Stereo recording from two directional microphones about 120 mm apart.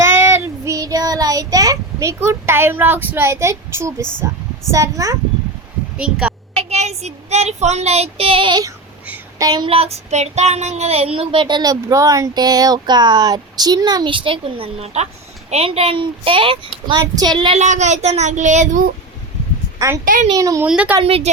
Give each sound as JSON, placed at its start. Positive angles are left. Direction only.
{"t": 0.0, "sound": "child singing", "side_deg": -20}
{"t": 4.7, "sound": "speech", "side_deg": -25}
{"t": 6.0, "sound": "a woman's voice", "side_deg": -5}
{"t": 6.6, "sound": "speech", "side_deg": -65}
{"t": 9.4, "sound": "speech", "side_deg": -35}
{"t": 9.6, "sound": "a woman's voice", "side_deg": -55}
{"t": 16.9, "sound": "speech", "side_deg": -35}
{"t": 17.6, "sound": "speech", "side_deg": -75}
{"t": 20.3, "sound": "speech", "side_deg": -30}
{"t": 20.7, "sound": "a woman's voice", "side_deg": -10}
{"t": 21.0, "sound": "a woman's voice", "side_deg": -50}